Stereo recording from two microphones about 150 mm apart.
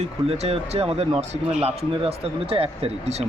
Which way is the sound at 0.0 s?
45° right (ahead or behind).